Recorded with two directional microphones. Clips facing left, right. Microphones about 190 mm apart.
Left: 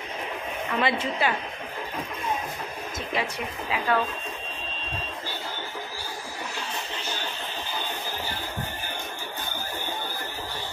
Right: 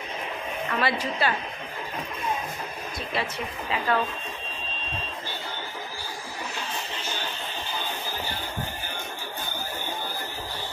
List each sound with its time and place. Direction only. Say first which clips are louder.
0.7 s a woman's voice: left 1 dB; 20° left (ahead or behind)
3.1 s a woman's voice: left 1 dB; 15° left (ahead or behind)